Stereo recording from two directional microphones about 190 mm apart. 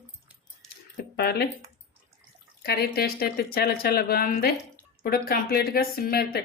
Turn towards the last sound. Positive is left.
turn(degrees=55)  # may be behind; listen again after turning